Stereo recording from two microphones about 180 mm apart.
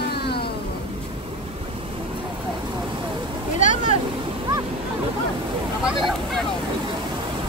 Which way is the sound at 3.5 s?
45° left (ahead or behind).